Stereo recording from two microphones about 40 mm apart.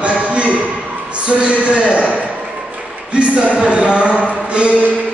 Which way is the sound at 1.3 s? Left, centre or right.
Right.